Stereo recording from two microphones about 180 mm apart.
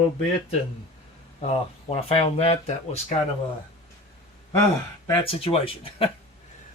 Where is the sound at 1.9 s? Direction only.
35° left (ahead or behind).